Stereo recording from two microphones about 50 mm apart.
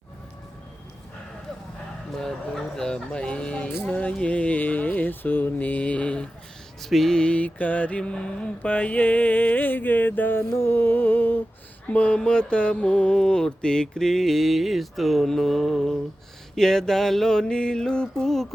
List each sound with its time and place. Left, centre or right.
2.1 s mantra: centre
6.8 s a sound: centre
7.2 s mantra: left
10.5 s music: left
11.9 s mantra: left; by 18.4 s centre